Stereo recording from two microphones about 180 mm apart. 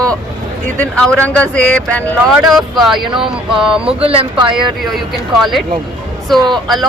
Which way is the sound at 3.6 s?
5° right (ahead or behind).